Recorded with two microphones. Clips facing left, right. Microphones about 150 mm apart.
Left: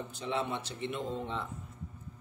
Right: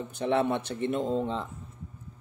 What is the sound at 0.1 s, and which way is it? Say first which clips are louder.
Speech: right 9 dB; 60° right (ahead or behind).